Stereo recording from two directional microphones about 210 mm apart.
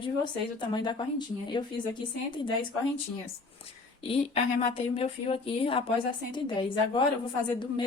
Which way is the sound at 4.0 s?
25° left (ahead or behind).